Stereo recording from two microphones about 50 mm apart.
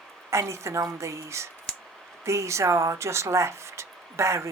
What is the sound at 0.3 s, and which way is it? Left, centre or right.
Speech, right.